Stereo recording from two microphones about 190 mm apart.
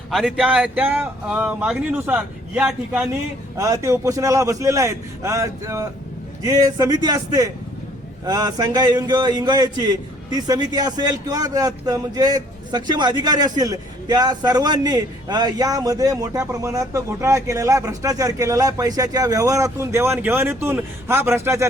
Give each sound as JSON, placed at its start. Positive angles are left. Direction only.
{"t": 0.1, "sound": "a man's voice", "side_deg": 0}